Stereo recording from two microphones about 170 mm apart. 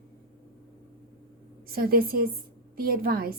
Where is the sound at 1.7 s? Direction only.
60° right (ahead or behind).